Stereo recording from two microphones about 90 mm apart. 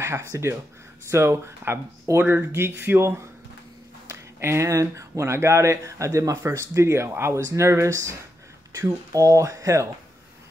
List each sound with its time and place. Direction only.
0.0 s speech: 30° right (ahead or behind)